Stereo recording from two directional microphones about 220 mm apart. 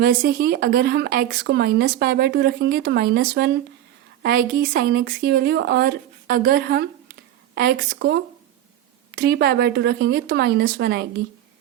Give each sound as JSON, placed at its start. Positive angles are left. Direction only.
{"t": 0.0, "sound": "speech", "side_deg": -40}